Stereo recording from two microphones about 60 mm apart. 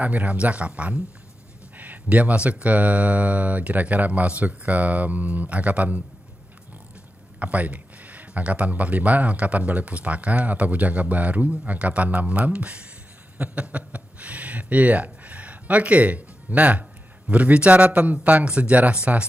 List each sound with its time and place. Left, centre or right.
0.0 s speech: right
7.3 s speech: right